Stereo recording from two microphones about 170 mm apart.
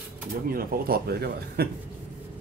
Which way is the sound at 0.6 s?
65° right (ahead or behind).